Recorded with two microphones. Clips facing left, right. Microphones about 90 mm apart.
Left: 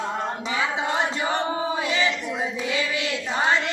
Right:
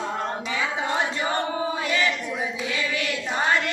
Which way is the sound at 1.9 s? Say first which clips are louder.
Right 1 dB; 20° left (ahead or behind).